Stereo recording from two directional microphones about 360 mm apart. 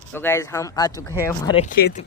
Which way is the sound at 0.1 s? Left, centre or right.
Centre.